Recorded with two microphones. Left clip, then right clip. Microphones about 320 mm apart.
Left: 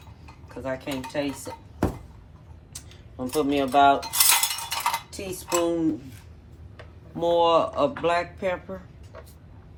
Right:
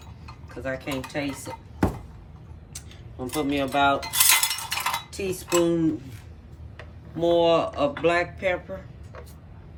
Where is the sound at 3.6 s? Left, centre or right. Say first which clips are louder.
Left 4 dB; left.